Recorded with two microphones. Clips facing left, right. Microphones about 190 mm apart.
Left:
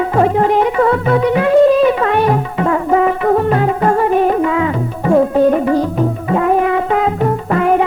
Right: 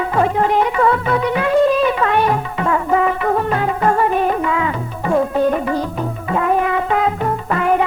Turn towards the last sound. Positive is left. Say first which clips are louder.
# left 3 dB
turn(degrees=40)  # may be behind; listen again after turning